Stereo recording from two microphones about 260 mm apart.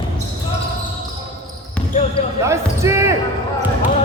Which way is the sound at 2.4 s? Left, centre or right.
Centre.